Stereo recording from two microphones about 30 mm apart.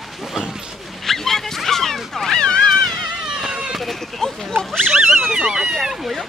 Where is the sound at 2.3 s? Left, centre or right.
Left.